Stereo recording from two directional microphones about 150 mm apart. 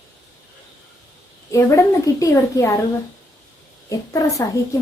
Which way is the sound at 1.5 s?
20° left (ahead or behind).